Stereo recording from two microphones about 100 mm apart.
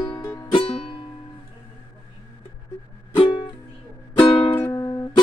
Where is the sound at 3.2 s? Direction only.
55° left (ahead or behind).